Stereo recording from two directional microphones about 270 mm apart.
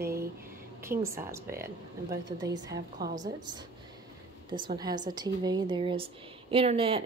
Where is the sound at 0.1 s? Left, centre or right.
Right.